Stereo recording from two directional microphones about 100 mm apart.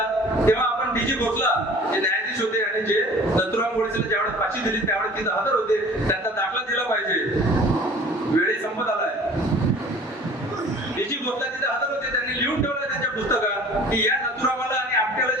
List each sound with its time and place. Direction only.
0.5 s speech: 25° left (ahead or behind)